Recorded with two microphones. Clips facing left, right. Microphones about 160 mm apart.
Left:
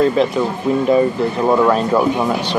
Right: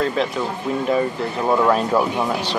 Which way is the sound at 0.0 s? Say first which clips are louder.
Left 7 dB; 5° left (ahead or behind).